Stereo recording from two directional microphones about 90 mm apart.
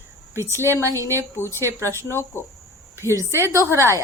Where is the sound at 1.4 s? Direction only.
25° left (ahead or behind).